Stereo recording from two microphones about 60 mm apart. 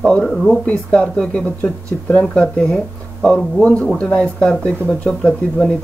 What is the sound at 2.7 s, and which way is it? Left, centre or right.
Speech, centre.